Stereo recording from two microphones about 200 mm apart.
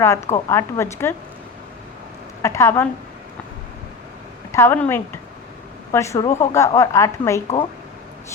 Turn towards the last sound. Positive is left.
turn(degrees=15)  # may be behind; listen again after turning